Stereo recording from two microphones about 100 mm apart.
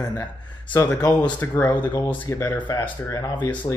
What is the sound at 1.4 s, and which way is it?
Speech, 15° left (ahead or behind).